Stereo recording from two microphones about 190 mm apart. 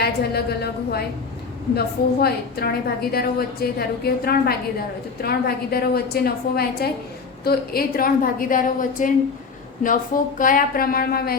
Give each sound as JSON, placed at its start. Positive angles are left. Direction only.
{"t": 0.0, "sound": "a woman's voice", "side_deg": 55}
{"t": 2.2, "sound": "a woman's voice", "side_deg": 55}